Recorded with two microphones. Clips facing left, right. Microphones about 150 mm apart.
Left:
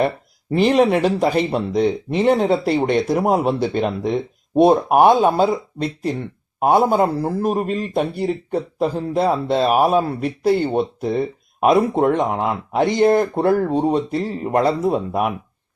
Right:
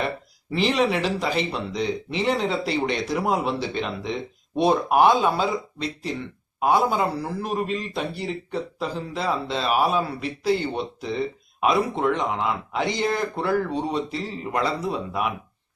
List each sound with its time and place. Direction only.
0.5 s speech: 50° left (ahead or behind)